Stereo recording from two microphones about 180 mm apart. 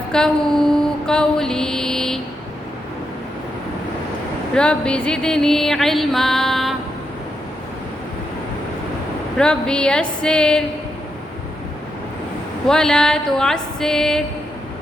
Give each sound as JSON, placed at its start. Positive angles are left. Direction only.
{"t": 0.1, "sound": "music", "side_deg": 5}
{"t": 4.5, "sound": "music", "side_deg": 5}
{"t": 9.4, "sound": "music", "side_deg": 5}
{"t": 12.6, "sound": "music", "side_deg": 5}